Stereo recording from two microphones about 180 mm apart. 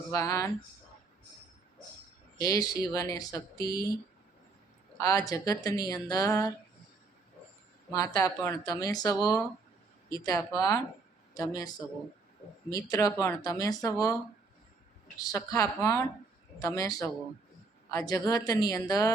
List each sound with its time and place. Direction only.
0.1 s speech: 15° left (ahead or behind)
2.4 s a woman's voice: 20° left (ahead or behind)
4.9 s a woman's voice: 20° left (ahead or behind)
7.9 s a woman's voice: 15° left (ahead or behind)
12.7 s a woman's voice: 20° left (ahead or behind)
15.2 s a woman's voice: 15° left (ahead or behind)